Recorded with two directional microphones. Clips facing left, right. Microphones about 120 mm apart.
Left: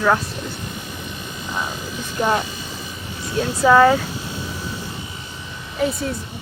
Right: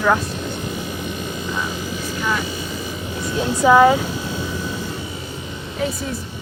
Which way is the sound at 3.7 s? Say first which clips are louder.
Right 1 dB; 15° right (ahead or behind).